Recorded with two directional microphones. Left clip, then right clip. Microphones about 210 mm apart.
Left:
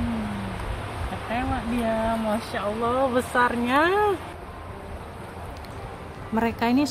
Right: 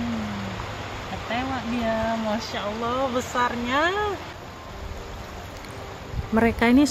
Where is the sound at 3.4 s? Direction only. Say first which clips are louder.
Left 2 dB; 30° left (ahead or behind).